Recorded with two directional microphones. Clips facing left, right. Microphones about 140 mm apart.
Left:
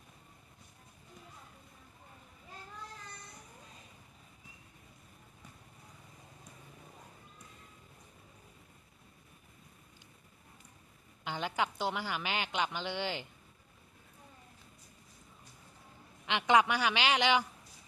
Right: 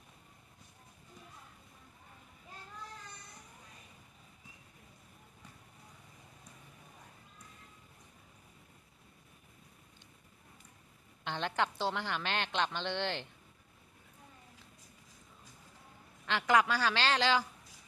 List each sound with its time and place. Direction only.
11.2 s a woman's voice: 10° left (ahead or behind)
16.3 s a woman's voice: 20° left (ahead or behind)